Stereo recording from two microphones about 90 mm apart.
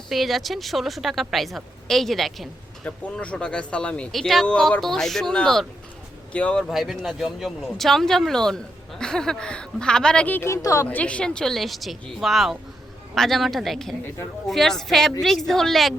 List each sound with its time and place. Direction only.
0.1 s a woman's voice: centre (ahead or behind)
2.8 s a woman's voice: 15° left (ahead or behind)
10.3 s a woman's voice: 30° left (ahead or behind)
10.8 s a woman's voice: 15° left (ahead or behind)